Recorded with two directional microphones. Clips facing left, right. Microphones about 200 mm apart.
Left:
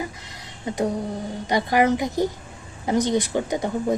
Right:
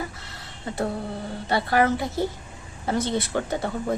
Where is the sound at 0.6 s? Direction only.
15° left (ahead or behind).